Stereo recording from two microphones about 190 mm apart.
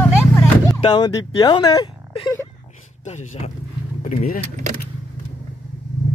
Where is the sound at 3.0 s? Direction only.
35° left (ahead or behind).